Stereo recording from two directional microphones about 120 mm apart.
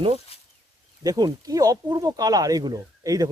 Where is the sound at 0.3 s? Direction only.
55° left (ahead or behind).